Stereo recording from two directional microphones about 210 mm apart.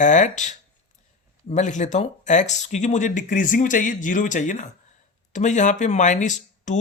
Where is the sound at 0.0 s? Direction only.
35° left (ahead or behind).